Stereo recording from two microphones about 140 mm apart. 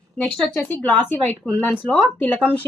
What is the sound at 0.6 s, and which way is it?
A woman's voice, 15° left (ahead or behind).